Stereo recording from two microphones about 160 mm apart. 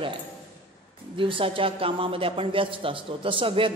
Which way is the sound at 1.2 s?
35° right (ahead or behind).